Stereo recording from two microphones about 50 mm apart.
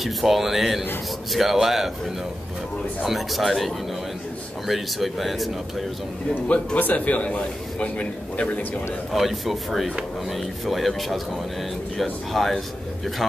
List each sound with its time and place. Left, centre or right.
0.0 s speech: centre
3.1 s speech: centre
6.4 s a man's voice: left
9.1 s speech: centre